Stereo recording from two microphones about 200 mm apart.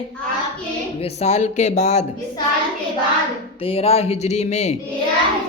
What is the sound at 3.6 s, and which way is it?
Speech, 30° left (ahead or behind).